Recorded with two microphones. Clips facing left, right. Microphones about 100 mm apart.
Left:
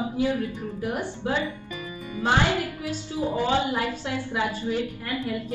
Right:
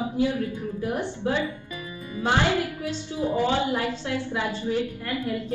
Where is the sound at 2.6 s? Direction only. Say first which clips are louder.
Right 1 dB; 20° right (ahead or behind).